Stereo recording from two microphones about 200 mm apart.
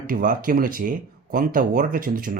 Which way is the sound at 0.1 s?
45° right (ahead or behind).